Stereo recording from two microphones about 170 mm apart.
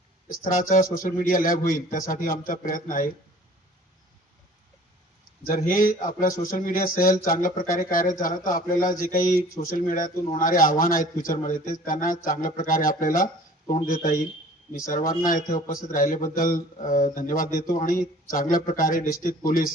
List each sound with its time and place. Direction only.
0.4 s speech: 50° left (ahead or behind)
5.6 s speech: 50° left (ahead or behind)